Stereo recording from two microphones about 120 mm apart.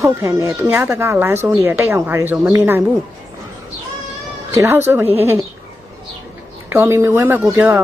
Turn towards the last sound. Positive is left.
turn(degrees=-20)  # may be behind; listen again after turning